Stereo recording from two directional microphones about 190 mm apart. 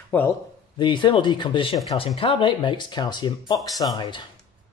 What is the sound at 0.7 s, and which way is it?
Speech, 25° left (ahead or behind).